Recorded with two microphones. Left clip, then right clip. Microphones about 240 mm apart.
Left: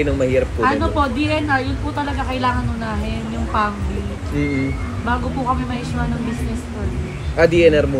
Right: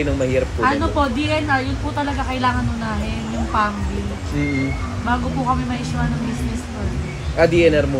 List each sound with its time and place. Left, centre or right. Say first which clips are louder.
0.0 s a man's voice: left 2 dB; centre
0.6 s a woman's voice: left 1 dB; right
3.5 s a woman's voice: even; right
7.3 s a man's voice: left 2 dB; centre